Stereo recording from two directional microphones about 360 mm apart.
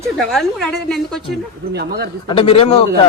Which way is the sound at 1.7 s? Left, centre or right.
Right.